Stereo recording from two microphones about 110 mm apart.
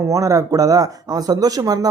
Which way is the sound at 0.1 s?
30° right (ahead or behind).